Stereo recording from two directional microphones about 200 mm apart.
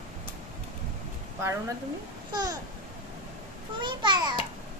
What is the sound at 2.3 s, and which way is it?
Babbling, 20° right (ahead or behind).